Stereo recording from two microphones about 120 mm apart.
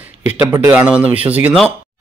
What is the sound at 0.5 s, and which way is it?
A man's voice, 20° right (ahead or behind).